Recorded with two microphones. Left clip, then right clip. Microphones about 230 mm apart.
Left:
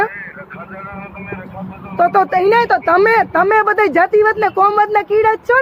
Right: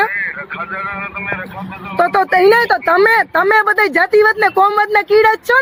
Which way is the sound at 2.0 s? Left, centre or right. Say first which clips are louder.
Right 1 dB; right.